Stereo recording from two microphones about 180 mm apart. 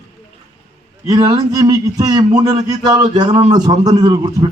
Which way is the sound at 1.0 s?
20° right (ahead or behind).